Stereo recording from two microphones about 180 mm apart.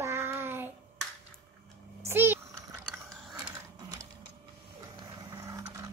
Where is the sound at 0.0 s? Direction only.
15° right (ahead or behind).